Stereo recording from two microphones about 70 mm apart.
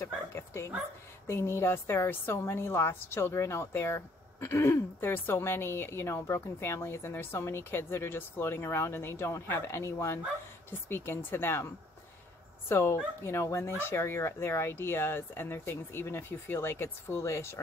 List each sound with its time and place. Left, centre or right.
0.0 s bow-wow: left
1.2 s speech: left